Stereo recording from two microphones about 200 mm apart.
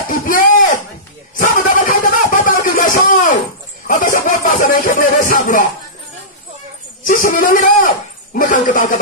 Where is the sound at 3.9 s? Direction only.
40° left (ahead or behind).